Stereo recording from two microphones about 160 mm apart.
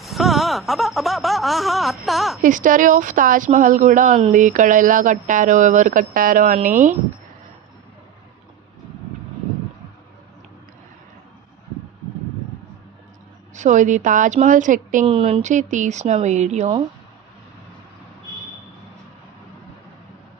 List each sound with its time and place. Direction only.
0.0 s a sound: centre (ahead or behind)
2.4 s a woman's voice: 55° right (ahead or behind)
13.5 s a woman's voice: 50° right (ahead or behind)
15.0 s a woman's voice: 35° right (ahead or behind)